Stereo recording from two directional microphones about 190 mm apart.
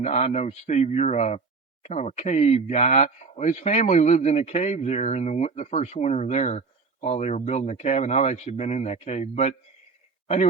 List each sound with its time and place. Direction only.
0.0 s speech: 35° left (ahead or behind)